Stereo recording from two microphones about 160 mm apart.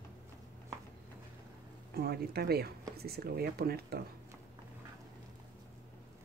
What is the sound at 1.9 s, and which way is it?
Speech, 80° right.